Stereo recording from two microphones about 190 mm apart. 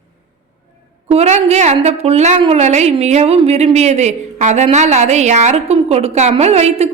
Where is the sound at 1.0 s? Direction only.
35° right (ahead or behind).